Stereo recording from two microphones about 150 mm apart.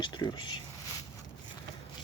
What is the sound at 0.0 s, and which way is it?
Speech, 30° left (ahead or behind).